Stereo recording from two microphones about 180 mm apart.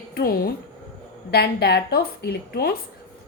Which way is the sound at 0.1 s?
60° left (ahead or behind).